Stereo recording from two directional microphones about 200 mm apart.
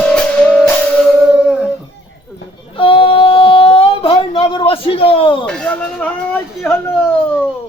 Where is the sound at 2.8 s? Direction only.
25° left (ahead or behind).